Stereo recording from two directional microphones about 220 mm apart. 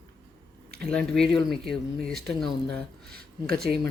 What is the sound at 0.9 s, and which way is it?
Speech, centre (ahead or behind).